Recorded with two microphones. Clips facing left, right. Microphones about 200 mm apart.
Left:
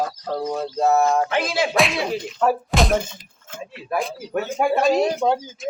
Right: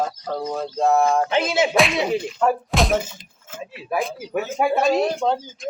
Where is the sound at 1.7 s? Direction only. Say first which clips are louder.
Right 2 dB; centre (ahead or behind).